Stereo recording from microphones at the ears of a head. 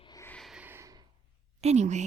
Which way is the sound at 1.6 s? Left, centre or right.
Right.